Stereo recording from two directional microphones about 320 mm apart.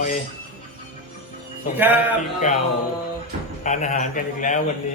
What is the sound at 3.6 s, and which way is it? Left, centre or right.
Speech, left.